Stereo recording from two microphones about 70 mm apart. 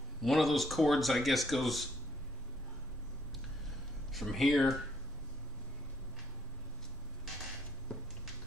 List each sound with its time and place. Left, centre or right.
0.2 s speech: centre
4.1 s speech: centre